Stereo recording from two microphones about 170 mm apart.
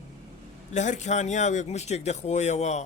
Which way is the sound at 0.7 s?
45° left (ahead or behind).